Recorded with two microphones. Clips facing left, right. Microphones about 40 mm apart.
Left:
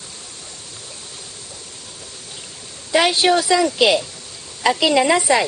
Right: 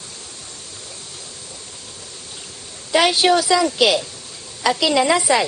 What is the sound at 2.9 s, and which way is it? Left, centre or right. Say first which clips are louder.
Speech: even; centre.